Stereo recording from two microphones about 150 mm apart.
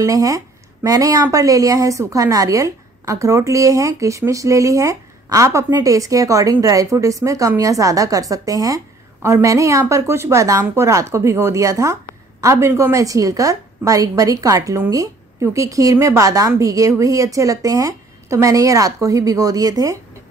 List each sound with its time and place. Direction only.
0.0 s a woman's voice: 20° right (ahead or behind)